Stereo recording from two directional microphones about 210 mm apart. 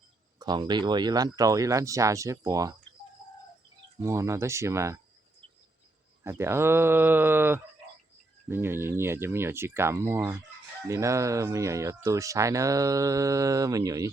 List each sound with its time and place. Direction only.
0.3 s speech: 20° right (ahead or behind)
4.0 s speech: 15° right (ahead or behind)
6.2 s speech: 10° right (ahead or behind)